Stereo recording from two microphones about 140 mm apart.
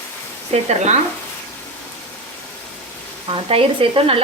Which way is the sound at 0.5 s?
50° right (ahead or behind).